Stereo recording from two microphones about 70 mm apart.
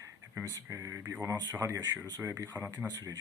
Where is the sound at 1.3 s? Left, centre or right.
Right.